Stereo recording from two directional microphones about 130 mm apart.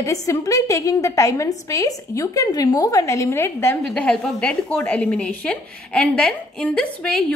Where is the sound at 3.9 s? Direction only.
5° left (ahead or behind).